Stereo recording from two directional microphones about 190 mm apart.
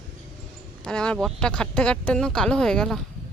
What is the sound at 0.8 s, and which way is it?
Speech, 5° left (ahead or behind).